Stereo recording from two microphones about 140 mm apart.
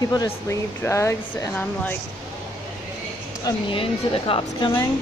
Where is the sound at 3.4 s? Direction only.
40° left (ahead or behind).